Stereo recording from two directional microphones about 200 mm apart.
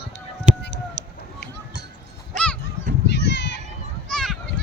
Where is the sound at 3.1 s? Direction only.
60° left (ahead or behind).